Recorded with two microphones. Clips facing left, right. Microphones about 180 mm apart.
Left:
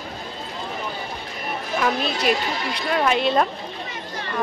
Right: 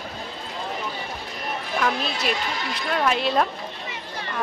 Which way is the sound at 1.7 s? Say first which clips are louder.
Left 3 dB; centre (ahead or behind).